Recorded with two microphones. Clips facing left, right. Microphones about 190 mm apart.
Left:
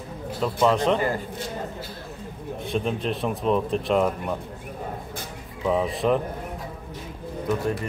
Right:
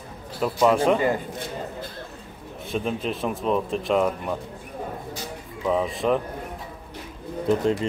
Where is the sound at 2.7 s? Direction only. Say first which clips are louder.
Even; centre (ahead or behind).